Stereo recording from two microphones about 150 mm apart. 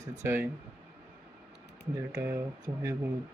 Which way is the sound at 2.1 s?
20° right (ahead or behind).